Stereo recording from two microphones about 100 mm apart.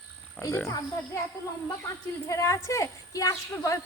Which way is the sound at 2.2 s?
30° left (ahead or behind).